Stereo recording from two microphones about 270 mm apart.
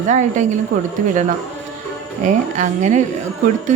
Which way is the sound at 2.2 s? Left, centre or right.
Right.